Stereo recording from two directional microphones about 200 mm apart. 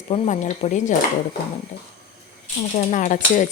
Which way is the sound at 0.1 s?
35° left (ahead or behind).